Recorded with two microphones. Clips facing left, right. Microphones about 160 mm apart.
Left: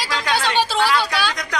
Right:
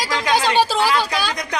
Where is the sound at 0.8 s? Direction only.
15° right (ahead or behind).